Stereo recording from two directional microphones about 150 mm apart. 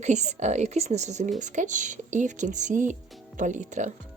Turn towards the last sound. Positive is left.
turn(degrees=-55)  # may be behind; listen again after turning